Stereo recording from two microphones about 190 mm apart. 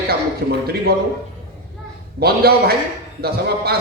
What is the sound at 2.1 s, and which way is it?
A man's voice, 55° right (ahead or behind).